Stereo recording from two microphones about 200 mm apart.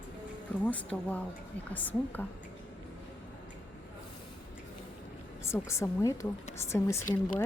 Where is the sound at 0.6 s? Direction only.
5° left (ahead or behind).